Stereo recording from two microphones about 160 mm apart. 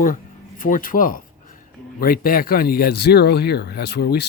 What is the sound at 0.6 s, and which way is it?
Speech, 55° left (ahead or behind).